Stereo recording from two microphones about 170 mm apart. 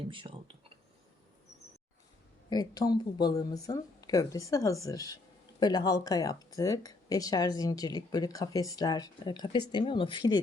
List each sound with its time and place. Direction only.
0.1 s speech: 30° right (ahead or behind)
2.5 s speech: 25° left (ahead or behind)